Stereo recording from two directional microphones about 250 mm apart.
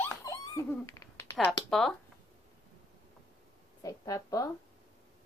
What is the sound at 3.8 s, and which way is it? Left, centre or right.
Speech, centre.